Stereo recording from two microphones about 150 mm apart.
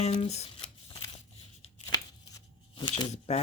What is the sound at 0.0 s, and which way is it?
Speech, 45° left (ahead or behind).